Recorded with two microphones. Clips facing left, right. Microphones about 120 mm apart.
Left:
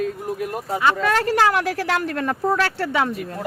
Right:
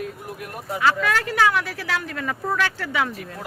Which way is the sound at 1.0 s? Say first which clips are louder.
Left 3 dB; 35° left (ahead or behind).